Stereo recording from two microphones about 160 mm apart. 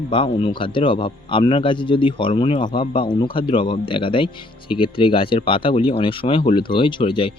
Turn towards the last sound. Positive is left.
turn(degrees=35)  # may be behind; listen again after turning